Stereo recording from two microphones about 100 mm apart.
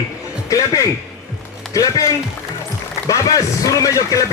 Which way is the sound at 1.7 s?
35° left (ahead or behind).